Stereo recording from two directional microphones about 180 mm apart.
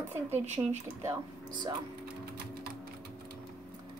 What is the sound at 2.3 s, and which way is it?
Typewriter, 55° right (ahead or behind).